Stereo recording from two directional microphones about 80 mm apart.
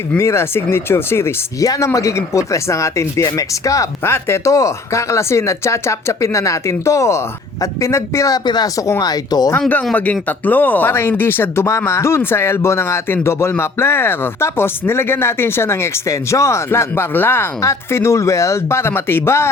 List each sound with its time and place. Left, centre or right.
0.2 s speech: left
4.0 s speech: left
8.3 s speech: left
9.6 s speech: centre